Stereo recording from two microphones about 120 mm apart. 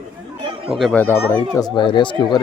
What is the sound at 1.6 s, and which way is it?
Speech, 35° left (ahead or behind).